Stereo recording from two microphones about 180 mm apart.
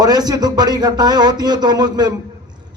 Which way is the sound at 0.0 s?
20° right (ahead or behind).